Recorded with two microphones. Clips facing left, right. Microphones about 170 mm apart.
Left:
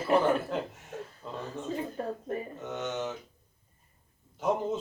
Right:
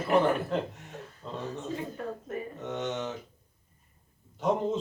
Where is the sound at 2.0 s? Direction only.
35° left (ahead or behind).